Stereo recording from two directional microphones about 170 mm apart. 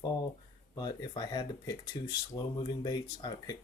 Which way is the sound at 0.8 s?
25° left (ahead or behind).